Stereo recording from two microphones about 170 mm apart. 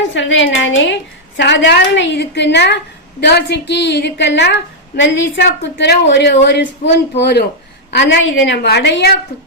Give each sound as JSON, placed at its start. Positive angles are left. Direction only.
{"t": 0.1, "sound": "a woman's voice", "side_deg": 90}
{"t": 7.2, "sound": "speech", "side_deg": 75}
{"t": 7.9, "sound": "a woman's voice", "side_deg": 90}